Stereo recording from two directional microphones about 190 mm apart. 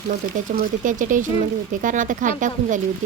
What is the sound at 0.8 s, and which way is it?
A woman's voice, 45° right (ahead or behind).